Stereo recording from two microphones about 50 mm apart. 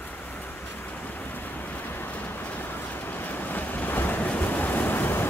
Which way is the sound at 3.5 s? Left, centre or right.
Left.